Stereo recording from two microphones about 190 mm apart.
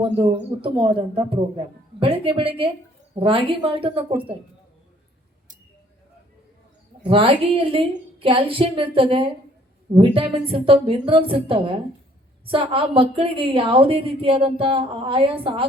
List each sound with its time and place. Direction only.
0.2 s a woman's voice: 30° right (ahead or behind)
7.1 s a woman's voice: 30° right (ahead or behind)